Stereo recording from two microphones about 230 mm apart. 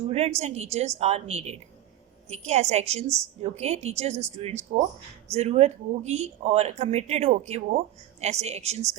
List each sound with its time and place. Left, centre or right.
0.1 s speech: right